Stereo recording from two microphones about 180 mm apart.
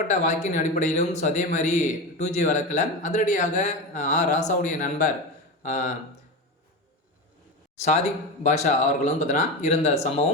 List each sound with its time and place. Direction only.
0.1 s a man's voice: 40° left (ahead or behind)
7.9 s a man's voice: 40° left (ahead or behind)